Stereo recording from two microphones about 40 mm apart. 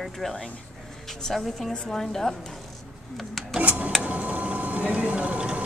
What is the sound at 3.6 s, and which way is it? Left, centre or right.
Printer, right.